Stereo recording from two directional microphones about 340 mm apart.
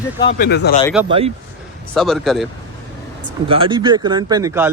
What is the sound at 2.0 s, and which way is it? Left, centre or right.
Speech, centre.